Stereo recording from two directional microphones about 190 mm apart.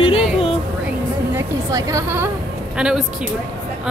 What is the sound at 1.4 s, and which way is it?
Speech, 15° right (ahead or behind).